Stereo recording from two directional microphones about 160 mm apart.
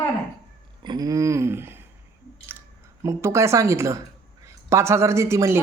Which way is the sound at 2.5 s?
15° right (ahead or behind).